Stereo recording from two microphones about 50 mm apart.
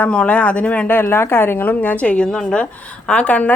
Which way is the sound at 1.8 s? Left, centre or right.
Left.